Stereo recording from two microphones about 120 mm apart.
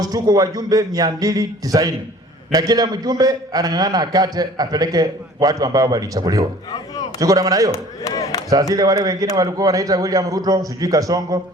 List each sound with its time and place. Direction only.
0.0 s a man's voice: 30° right (ahead or behind)
6.7 s speech: 35° left (ahead or behind)
7.2 s a man's voice: 30° right (ahead or behind)
7.7 s speech: 30° left (ahead or behind)
8.7 s a man's voice: 30° right (ahead or behind)